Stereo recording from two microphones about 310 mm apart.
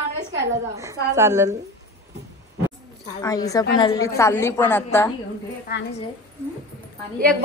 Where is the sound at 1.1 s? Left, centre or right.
Centre.